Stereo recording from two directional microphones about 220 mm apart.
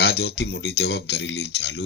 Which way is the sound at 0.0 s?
45° left (ahead or behind).